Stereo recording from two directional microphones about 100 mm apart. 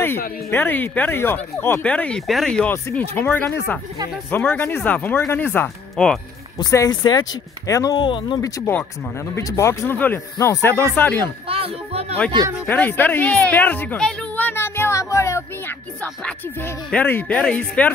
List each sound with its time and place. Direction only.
0.0 s speech: 20° left (ahead or behind); by 2.7 s 5° left (ahead or behind)
2.7 s speech: 20° left (ahead or behind)
6.0 s speech: 10° left (ahead or behind)
6.6 s speech: 40° left (ahead or behind)
8.0 s speech: 50° left (ahead or behind)
8.4 s speech: 30° left (ahead or behind)
11.4 s a sound: 75° right (ahead or behind); by 12.2 s 90° right
12.6 s speech: 20° left (ahead or behind)
14.3 s music: 20° left (ahead or behind)
16.9 s speech: 15° left (ahead or behind)